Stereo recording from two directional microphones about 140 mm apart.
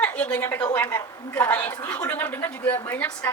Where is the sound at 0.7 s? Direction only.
10° left (ahead or behind).